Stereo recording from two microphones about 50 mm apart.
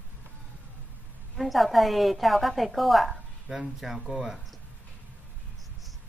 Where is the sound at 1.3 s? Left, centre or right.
Centre.